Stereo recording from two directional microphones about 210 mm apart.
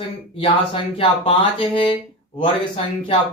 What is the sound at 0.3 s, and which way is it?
Speech, 25° left (ahead or behind).